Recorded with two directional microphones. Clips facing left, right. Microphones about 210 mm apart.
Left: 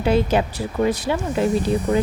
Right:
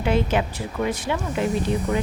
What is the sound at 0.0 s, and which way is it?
Speech, 35° left (ahead or behind).